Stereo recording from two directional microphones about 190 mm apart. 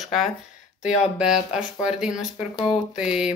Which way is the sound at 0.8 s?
35° left (ahead or behind).